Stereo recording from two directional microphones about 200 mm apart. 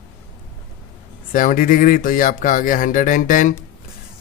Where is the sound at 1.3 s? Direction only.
40° left (ahead or behind).